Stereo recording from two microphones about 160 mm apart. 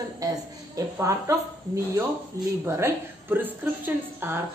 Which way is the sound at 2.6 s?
15° right (ahead or behind).